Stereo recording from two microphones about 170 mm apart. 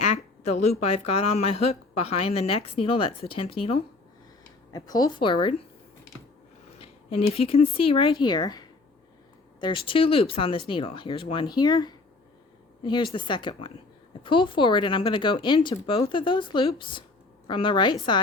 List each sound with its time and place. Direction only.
0.0 s speech: 40° left (ahead or behind)
4.7 s speech: 20° left (ahead or behind)
6.7 s a woman's voice: 35° left (ahead or behind)